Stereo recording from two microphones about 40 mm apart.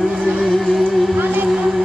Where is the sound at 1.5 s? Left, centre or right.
Centre.